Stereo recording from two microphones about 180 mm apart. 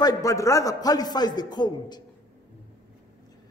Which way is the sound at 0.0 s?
20° left (ahead or behind).